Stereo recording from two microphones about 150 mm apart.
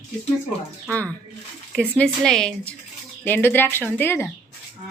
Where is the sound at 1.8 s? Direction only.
5° left (ahead or behind).